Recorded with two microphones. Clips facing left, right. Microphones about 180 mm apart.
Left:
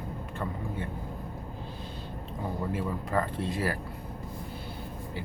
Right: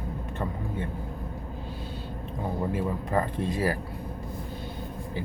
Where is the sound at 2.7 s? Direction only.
15° right (ahead or behind).